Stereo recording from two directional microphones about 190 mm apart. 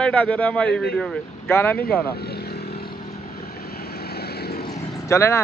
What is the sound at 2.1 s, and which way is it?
Vehicle, 55° left (ahead or behind).